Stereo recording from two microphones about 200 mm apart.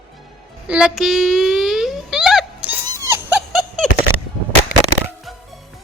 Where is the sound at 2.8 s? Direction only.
15° right (ahead or behind).